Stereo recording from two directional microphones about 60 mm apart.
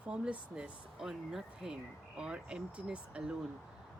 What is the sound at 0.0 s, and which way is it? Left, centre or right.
Speech, centre.